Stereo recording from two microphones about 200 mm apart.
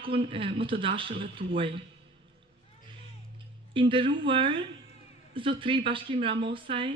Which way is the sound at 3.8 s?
25° right (ahead or behind).